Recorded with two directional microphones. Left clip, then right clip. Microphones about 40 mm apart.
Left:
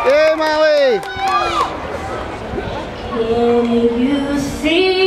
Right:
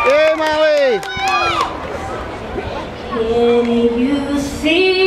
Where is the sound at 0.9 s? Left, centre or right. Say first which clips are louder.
Even; right.